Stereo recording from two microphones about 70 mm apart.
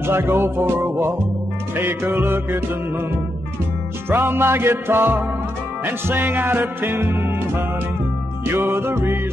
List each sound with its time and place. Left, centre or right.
0.0 s music: right
4.1 s music: right